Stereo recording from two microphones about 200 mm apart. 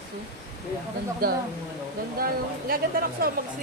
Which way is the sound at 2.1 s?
50° right (ahead or behind).